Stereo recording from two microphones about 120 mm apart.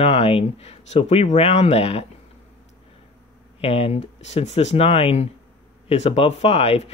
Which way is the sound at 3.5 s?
55° left (ahead or behind).